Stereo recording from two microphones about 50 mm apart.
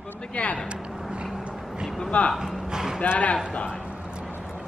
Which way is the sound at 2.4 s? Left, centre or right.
Centre.